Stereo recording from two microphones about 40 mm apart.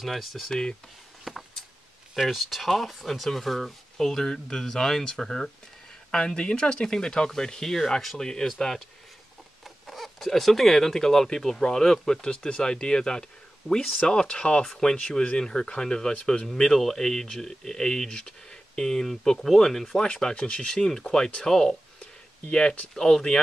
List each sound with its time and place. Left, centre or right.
0.0 s speech: centre
1.3 s a sound: centre
2.2 s speech: centre
6.1 s speech: left
9.8 s speech: centre; by 13.2 s left
14.2 s speech: left
14.6 s speech: centre
20.0 s speech: centre
20.7 s speech: centre
22.4 s speech: left